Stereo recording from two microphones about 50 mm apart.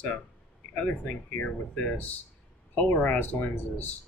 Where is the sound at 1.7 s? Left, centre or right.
Left.